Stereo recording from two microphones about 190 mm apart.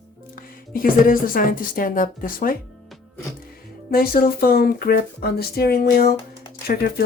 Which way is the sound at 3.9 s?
50° left (ahead or behind).